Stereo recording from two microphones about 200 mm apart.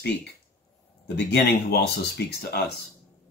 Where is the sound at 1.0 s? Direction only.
55° left (ahead or behind).